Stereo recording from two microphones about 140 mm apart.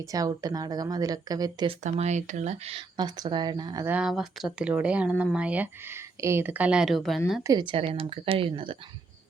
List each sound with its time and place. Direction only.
0.1 s speech: 25° right (ahead or behind)
1.8 s speech: 55° right (ahead or behind)
3.0 s speech: 30° right (ahead or behind)
3.8 s speech: 10° right (ahead or behind)
7.4 s speech: 30° right (ahead or behind)